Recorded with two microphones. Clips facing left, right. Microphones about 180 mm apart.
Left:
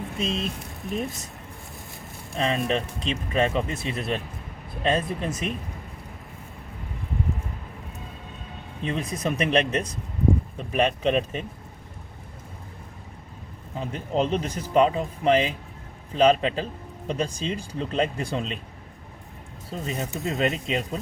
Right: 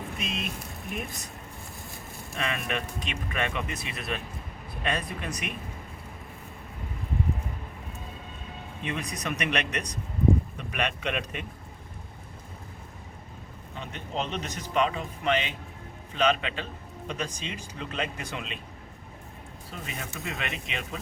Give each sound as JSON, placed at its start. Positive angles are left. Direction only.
{"t": 0.2, "sound": "speech", "side_deg": 30}
{"t": 0.9, "sound": "speech", "side_deg": 0}
{"t": 2.3, "sound": "speech", "side_deg": 30}
{"t": 8.8, "sound": "speech", "side_deg": 30}
{"t": 13.7, "sound": "speech", "side_deg": 35}
{"t": 19.7, "sound": "speech", "side_deg": 35}